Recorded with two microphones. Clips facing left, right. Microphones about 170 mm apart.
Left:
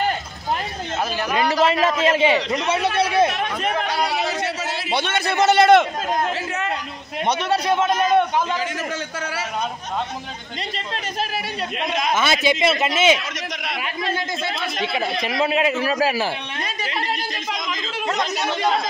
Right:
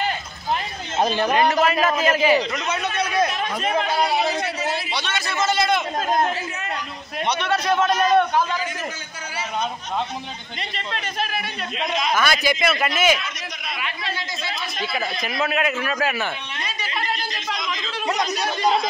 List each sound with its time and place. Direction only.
1.6 s a man's voice: 25° left (ahead or behind)
4.9 s a man's voice: 55° left (ahead or behind); by 5.9 s 70° left (ahead or behind)
7.2 s a man's voice: 40° left (ahead or behind)
7.6 s a man's voice: 15° left (ahead or behind)
12.1 s a man's voice: 25° left (ahead or behind)
15.2 s a man's voice: 30° left (ahead or behind)
18.1 s a man's voice: 25° left (ahead or behind)